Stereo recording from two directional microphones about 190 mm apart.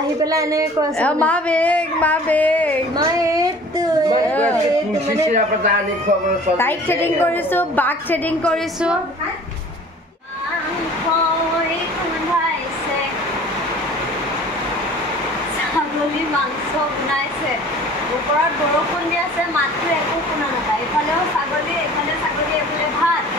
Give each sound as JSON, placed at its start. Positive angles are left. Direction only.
{"t": 0.2, "sound": "a woman's voice", "side_deg": -15}
{"t": 0.9, "sound": "a woman's voice", "side_deg": 5}
{"t": 6.6, "sound": "a woman's voice", "side_deg": 10}